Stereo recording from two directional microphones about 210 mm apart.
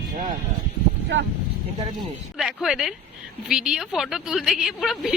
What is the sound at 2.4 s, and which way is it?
A woman's voice, centre (ahead or behind).